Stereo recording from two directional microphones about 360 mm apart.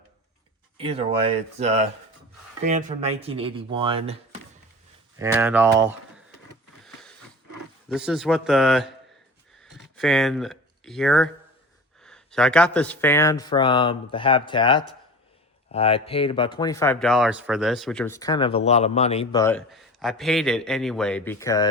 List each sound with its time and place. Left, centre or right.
0.8 s speech: centre
5.2 s speech: centre
7.9 s speech: centre
9.6 s a sound: centre
10.0 s a man's voice: centre